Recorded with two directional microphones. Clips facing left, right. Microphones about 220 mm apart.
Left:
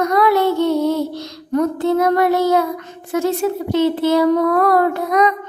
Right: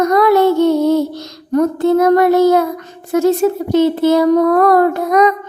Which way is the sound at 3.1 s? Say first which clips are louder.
Right 6 dB; 40° right (ahead or behind).